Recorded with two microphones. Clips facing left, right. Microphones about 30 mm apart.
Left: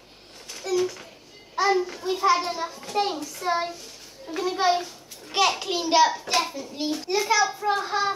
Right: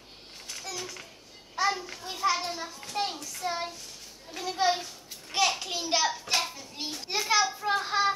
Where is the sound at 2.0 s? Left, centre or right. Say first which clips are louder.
Left 7 dB; centre.